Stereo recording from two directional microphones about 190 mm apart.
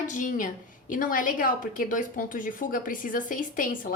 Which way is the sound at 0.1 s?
40° left (ahead or behind).